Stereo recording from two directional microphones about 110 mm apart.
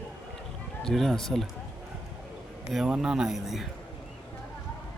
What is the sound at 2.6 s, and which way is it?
Speech, 5° right (ahead or behind).